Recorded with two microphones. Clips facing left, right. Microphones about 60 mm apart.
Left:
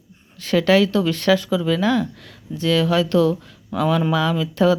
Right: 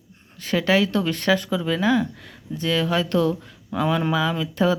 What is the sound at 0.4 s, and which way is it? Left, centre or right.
Speech, centre.